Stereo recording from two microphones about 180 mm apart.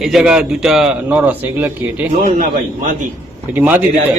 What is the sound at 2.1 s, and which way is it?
Speech, 45° right (ahead or behind).